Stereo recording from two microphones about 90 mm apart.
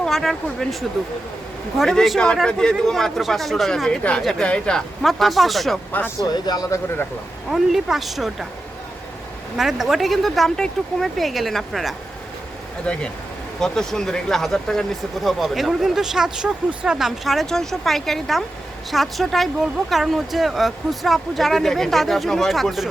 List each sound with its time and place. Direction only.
0.0 s speech: 5° left (ahead or behind)
6.1 s speech: 45° left (ahead or behind)
7.5 s speech: 5° right (ahead or behind)
9.6 s speech: 5° right (ahead or behind)
12.8 s speech: 10° left (ahead or behind)